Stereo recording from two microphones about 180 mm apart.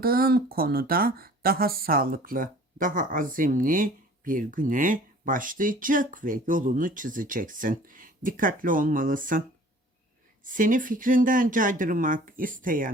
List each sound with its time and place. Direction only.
0.0 s speech: 55° right (ahead or behind)
10.4 s speech: 45° right (ahead or behind)